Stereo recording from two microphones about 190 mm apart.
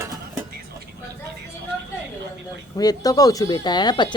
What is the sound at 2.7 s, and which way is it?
Speech, 20° left (ahead or behind).